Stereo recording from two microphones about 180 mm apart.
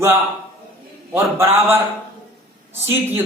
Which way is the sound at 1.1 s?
15° right (ahead or behind).